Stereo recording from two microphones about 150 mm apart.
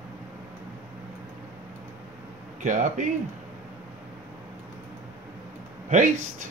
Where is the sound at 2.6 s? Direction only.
55° right (ahead or behind).